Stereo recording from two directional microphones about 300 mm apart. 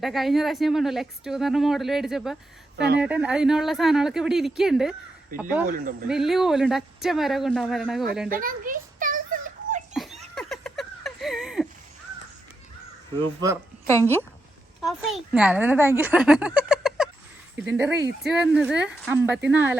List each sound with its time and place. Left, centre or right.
0.0 s speech: centre
2.7 s a woman's voice: right
3.0 s speech: centre
6.1 s speech: centre
8.3 s a sound: right
9.9 s laughter: centre
10.3 s a sound: centre
14.0 s a woman's voice: centre
16.6 s a sound: centre
17.6 s a woman's voice: centre